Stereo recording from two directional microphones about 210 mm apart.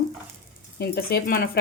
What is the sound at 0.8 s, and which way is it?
Speech, 45° left (ahead or behind).